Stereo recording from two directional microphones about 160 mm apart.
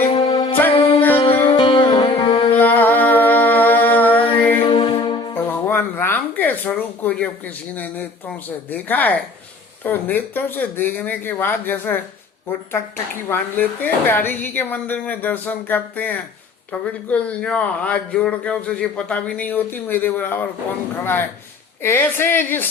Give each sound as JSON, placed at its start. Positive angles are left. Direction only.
{"t": 0.1, "sound": "music", "side_deg": 30}
{"t": 0.7, "sound": "music", "side_deg": 35}
{"t": 2.6, "sound": "a sound", "side_deg": 10}
{"t": 4.6, "sound": "music", "side_deg": 30}
{"t": 5.3, "sound": "music", "side_deg": 15}
{"t": 8.4, "sound": "a man's voice", "side_deg": 10}
{"t": 13.2, "sound": "a man's voice", "side_deg": 10}